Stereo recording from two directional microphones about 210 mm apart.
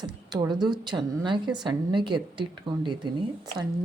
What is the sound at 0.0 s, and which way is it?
A woman's voice, 20° right (ahead or behind).